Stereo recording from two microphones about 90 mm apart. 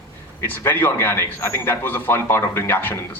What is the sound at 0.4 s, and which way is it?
A man's voice, 20° left (ahead or behind).